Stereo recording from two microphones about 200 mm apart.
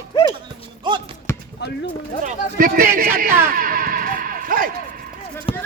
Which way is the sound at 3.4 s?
45° right (ahead or behind).